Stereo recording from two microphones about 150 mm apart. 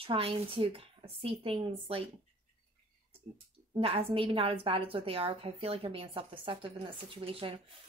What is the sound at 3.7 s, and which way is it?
A woman's voice, 40° right (ahead or behind).